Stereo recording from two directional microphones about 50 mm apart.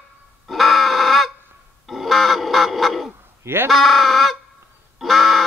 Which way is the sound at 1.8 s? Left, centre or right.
Centre.